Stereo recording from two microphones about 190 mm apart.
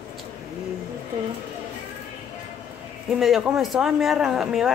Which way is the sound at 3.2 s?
Centre (ahead or behind).